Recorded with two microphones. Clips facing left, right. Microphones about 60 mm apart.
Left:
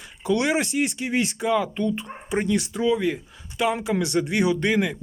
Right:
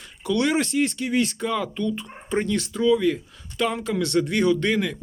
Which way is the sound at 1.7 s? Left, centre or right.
Left.